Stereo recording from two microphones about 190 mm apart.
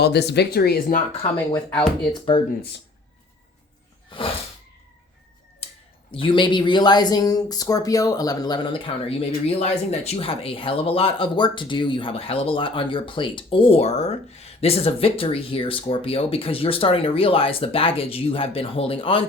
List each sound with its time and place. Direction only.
0.0 s speech: 60° left (ahead or behind); by 1.3 s 45° left (ahead or behind)
1.5 s speech: 5° left (ahead or behind)
2.3 s speech: 25° left (ahead or behind)
4.1 s speech: 25° left (ahead or behind)
5.6 s a sound: 35° left (ahead or behind)
6.1 s speech: 25° left (ahead or behind)